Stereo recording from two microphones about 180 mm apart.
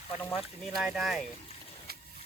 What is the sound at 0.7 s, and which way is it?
Speech, centre (ahead or behind).